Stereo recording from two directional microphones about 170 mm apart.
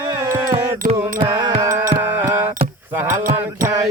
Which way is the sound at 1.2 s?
35° right (ahead or behind).